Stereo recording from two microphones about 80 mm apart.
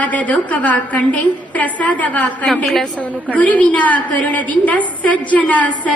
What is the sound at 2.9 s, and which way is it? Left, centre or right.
A woman's voice, centre.